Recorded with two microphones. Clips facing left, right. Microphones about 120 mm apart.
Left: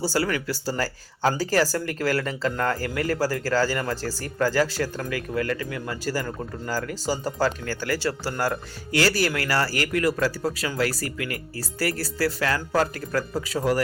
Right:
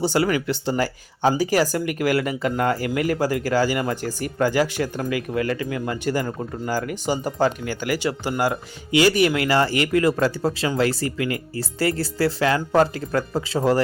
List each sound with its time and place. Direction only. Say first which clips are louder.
0.0 s speech: right 4 dB; 20° right (ahead or behind)